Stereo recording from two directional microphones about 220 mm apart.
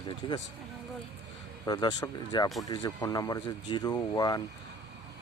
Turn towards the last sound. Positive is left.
turn(degrees=15)  # may be behind; listen again after turning